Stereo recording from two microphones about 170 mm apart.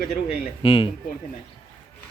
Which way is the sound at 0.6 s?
30° left (ahead or behind).